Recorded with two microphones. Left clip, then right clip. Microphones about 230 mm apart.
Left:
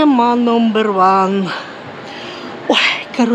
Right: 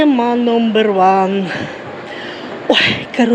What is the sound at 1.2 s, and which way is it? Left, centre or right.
Speech, centre.